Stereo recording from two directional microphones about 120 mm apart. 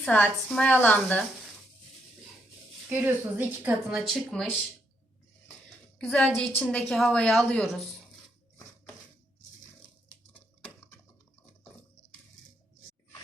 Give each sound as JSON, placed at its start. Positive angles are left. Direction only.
{"t": 0.0, "sound": "a woman's voice", "side_deg": 10}
{"t": 2.9, "sound": "a woman's voice", "side_deg": -15}
{"t": 3.9, "sound": "speech", "side_deg": 5}
{"t": 6.0, "sound": "a woman's voice", "side_deg": 5}